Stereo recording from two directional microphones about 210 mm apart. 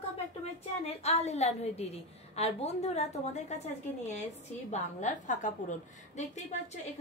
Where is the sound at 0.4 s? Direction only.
30° left (ahead or behind).